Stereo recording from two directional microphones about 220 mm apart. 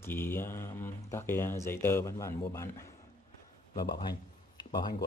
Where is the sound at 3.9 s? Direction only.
20° left (ahead or behind).